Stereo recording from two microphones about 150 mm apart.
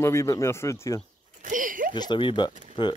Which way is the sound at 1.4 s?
65° right (ahead or behind).